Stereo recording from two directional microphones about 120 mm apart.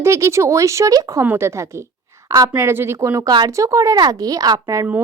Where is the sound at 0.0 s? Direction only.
25° right (ahead or behind).